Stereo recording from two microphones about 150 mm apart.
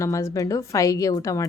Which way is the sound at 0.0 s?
20° left (ahead or behind).